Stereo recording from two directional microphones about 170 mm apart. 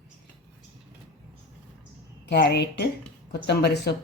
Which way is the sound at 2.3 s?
80° left.